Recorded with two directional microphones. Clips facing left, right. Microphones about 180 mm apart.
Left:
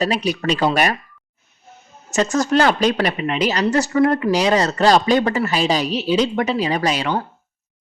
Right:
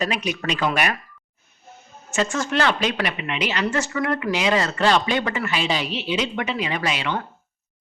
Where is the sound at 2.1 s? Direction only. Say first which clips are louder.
Left 6 dB; 40° left (ahead or behind).